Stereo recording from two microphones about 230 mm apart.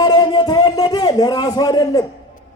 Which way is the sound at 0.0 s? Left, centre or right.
Centre.